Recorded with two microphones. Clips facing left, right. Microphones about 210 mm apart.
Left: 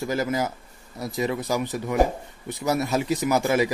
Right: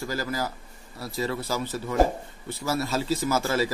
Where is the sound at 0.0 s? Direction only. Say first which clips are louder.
Left 5 dB; 20° left (ahead or behind).